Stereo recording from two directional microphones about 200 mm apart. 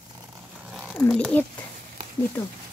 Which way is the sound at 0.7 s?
5° right (ahead or behind).